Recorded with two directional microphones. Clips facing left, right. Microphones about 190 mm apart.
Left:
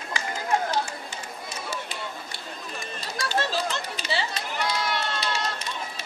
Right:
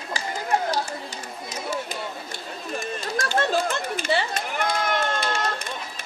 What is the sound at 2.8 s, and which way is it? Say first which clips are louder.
Chatter: right 5 dB; 45° right (ahead or behind).